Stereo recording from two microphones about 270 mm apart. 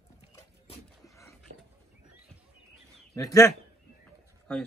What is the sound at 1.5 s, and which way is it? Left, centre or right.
Wild animals, right.